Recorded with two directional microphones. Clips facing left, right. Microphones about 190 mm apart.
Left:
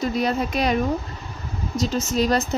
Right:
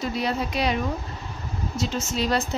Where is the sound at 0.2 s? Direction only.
45° left (ahead or behind).